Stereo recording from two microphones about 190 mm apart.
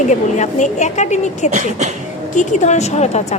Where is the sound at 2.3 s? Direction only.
35° left (ahead or behind).